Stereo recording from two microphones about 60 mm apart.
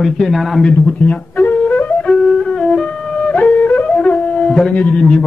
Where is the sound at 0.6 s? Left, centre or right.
Centre.